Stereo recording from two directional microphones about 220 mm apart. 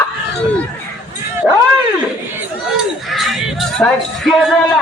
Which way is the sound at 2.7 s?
Centre (ahead or behind).